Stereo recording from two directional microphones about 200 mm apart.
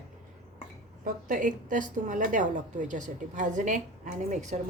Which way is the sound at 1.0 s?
40° right (ahead or behind).